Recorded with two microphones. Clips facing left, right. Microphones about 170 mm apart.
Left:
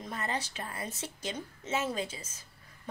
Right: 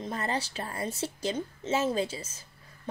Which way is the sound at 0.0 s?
30° right (ahead or behind).